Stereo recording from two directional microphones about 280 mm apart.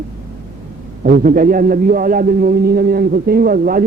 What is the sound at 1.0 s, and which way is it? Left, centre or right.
A man's voice, right.